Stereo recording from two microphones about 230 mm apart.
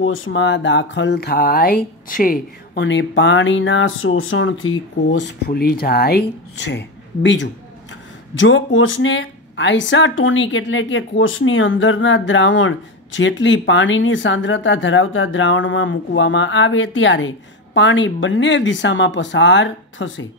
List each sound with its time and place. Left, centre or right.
0.0 s speech: left